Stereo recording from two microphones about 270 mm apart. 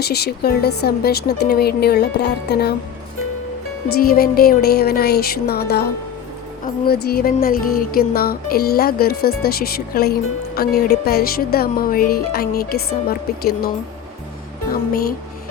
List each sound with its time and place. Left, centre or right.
0.0 s speech: left
4.0 s speech: left
6.8 s speech: left